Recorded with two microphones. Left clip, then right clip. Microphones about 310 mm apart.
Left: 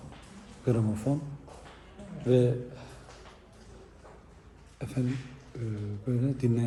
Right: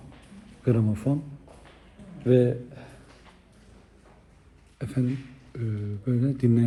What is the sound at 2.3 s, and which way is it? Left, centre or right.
Speech, right.